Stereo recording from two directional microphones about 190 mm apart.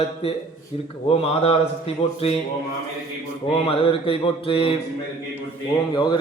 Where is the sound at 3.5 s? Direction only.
30° left (ahead or behind).